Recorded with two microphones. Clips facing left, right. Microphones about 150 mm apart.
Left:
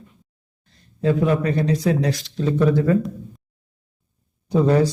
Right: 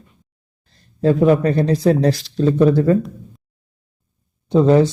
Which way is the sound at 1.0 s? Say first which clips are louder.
Right 5 dB; 40° right (ahead or behind).